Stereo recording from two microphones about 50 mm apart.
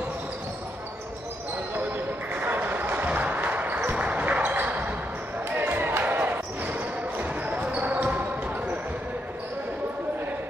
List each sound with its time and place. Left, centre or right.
2.4 s basketball bounce: right